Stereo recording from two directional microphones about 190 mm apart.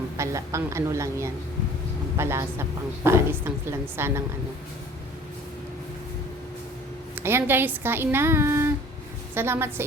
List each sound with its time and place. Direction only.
0.2 s a woman's voice: 15° right (ahead or behind)
7.2 s a woman's voice: 10° right (ahead or behind)